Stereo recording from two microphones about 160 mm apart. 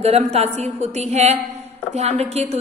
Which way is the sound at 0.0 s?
40° right (ahead or behind).